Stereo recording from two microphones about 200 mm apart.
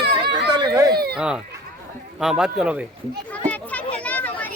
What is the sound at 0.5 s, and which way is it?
Speech, 20° right (ahead or behind).